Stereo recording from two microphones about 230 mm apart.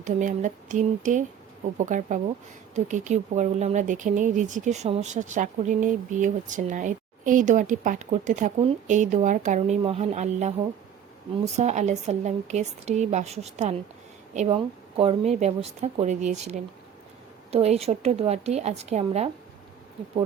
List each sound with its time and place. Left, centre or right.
0.0 s speech: right